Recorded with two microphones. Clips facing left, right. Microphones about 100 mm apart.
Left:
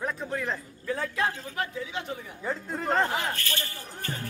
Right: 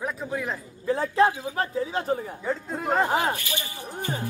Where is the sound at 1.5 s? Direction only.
35° right (ahead or behind).